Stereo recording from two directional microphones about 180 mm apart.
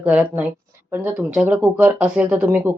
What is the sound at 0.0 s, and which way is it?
Speech, 10° right (ahead or behind).